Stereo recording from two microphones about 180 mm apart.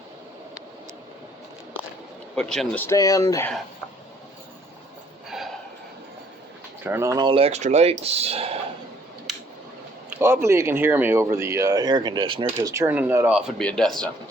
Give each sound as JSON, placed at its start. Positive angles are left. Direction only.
{"t": 2.3, "sound": "speech", "side_deg": 5}
{"t": 2.8, "sound": "speech", "side_deg": 20}
{"t": 6.8, "sound": "speech", "side_deg": -15}
{"t": 7.3, "sound": "speech", "side_deg": -35}
{"t": 10.1, "sound": "speech", "side_deg": -10}
{"t": 12.5, "sound": "speech", "side_deg": -15}
{"t": 13.6, "sound": "speech", "side_deg": 5}